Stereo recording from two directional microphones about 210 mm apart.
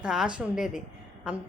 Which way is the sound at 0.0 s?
5° right (ahead or behind).